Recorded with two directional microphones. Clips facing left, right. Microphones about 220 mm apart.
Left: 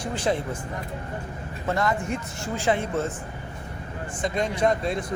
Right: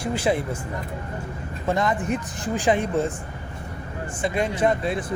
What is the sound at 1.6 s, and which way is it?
A man's voice, 20° right (ahead or behind).